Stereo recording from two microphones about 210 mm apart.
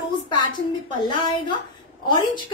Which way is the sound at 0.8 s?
20° left (ahead or behind).